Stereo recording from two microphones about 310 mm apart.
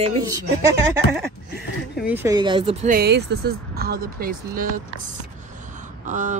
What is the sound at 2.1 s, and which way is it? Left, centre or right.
Speech, centre.